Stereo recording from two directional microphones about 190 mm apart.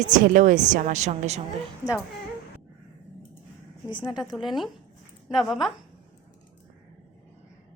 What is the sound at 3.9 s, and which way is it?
Speech, 25° left (ahead or behind).